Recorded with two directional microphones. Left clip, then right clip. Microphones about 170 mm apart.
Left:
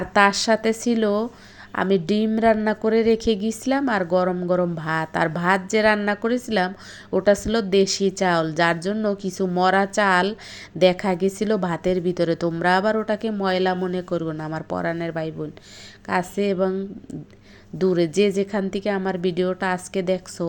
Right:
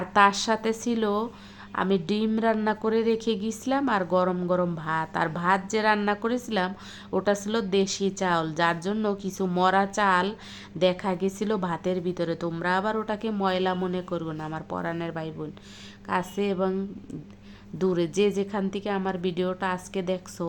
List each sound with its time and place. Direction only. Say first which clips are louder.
0.1 s a woman's voice: left 3 dB; 15° left (ahead or behind)
17.7 s a woman's voice: left 5 dB; 15° left (ahead or behind)